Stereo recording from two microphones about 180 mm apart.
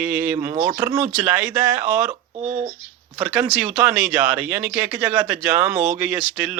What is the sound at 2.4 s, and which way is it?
Speech, 35° right (ahead or behind).